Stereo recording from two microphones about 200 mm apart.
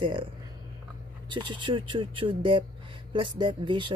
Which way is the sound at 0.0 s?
25° right (ahead or behind).